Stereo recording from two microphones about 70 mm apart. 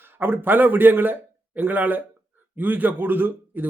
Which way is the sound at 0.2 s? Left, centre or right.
Right.